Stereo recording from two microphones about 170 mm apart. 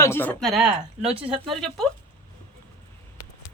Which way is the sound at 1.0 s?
35° right (ahead or behind).